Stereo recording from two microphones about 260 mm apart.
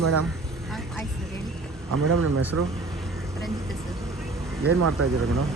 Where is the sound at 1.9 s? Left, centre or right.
Right.